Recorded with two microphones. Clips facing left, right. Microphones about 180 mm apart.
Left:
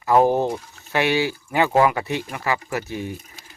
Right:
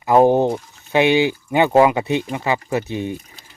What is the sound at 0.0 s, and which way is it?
Speech, 20° right (ahead or behind).